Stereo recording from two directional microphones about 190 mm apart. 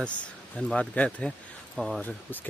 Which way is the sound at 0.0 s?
5° left (ahead or behind).